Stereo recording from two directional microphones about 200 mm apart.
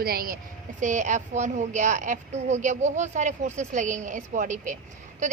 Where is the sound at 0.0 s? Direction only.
50° right (ahead or behind).